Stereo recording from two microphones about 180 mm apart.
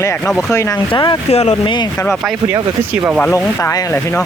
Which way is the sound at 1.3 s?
35° left (ahead or behind).